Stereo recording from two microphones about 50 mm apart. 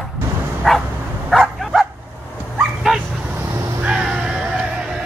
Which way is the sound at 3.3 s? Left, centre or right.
Right.